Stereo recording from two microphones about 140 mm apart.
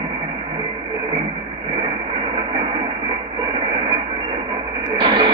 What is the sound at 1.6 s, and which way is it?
Radio, 35° right (ahead or behind).